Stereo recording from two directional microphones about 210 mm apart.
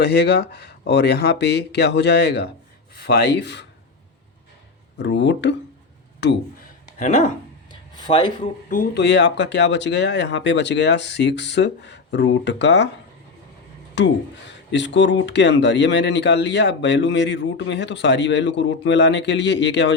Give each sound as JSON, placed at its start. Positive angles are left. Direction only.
{"t": 0.0, "sound": "speech", "side_deg": 50}
{"t": 4.9, "sound": "speech", "side_deg": 55}
{"t": 6.8, "sound": "a sound", "side_deg": 35}
{"t": 7.7, "sound": "a sound", "side_deg": 20}
{"t": 8.7, "sound": "speech", "side_deg": 40}
{"t": 9.0, "sound": "speech", "side_deg": 55}
{"t": 13.9, "sound": "speech", "side_deg": 55}